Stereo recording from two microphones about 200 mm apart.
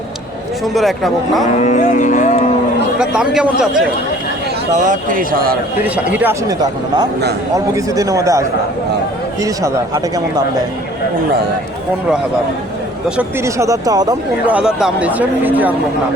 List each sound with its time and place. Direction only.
0.6 s speech: centre (ahead or behind)
1.5 s speech: 35° left (ahead or behind)
3.0 s speech: 5° right (ahead or behind)
4.7 s speech: 40° right (ahead or behind)
5.8 s speech: 10° right (ahead or behind)
13.1 s speech: 10° right (ahead or behind)
14.5 s speech: 5° right (ahead or behind)